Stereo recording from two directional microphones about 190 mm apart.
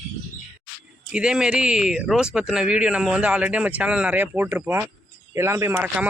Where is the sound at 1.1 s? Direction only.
5° right (ahead or behind).